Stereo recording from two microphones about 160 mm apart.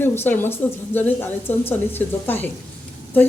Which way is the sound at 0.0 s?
15° left (ahead or behind).